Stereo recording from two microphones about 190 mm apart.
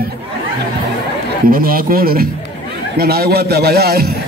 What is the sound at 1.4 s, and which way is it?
A man's voice, 50° right (ahead or behind).